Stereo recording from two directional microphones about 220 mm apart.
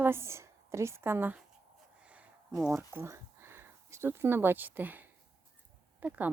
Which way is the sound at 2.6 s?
10° right (ahead or behind).